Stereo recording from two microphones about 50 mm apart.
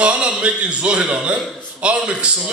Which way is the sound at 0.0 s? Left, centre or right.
Right.